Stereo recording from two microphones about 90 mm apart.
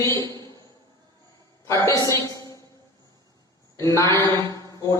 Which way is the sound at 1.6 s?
35° left (ahead or behind).